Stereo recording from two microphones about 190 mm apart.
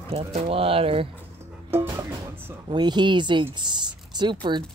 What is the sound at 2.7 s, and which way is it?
Speech, 25° right (ahead or behind).